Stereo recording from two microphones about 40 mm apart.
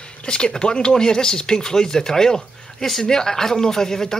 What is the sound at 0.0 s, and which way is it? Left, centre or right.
Speech, left.